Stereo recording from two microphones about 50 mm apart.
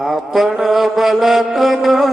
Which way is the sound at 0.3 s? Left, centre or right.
Centre.